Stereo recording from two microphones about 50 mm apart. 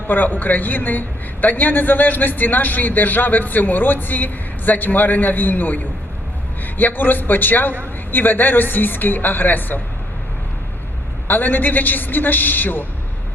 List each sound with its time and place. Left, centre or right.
0.1 s a woman's voice: left
11.3 s a woman's voice: left